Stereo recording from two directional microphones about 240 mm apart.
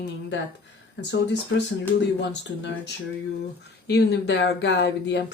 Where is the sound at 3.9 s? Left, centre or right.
Left.